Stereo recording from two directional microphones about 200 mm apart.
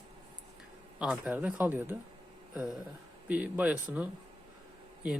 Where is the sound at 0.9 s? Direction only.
5° right (ahead or behind).